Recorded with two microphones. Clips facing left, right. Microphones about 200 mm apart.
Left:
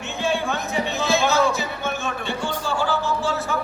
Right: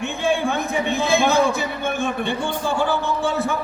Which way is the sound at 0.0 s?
55° right (ahead or behind).